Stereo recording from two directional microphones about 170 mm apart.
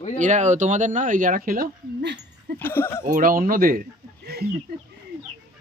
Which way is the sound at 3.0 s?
55° right (ahead or behind).